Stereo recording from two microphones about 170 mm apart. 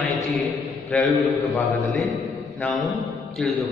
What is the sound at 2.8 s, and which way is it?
Speech, centre (ahead or behind).